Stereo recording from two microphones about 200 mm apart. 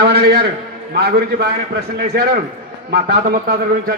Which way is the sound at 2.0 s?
45° right (ahead or behind).